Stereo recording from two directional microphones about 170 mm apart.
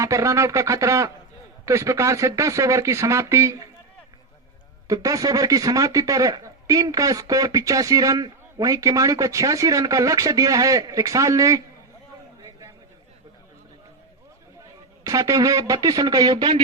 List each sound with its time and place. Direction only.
0.0 s speech: 20° right (ahead or behind)
4.9 s speech: 20° right (ahead or behind)
15.0 s speech: 20° right (ahead or behind)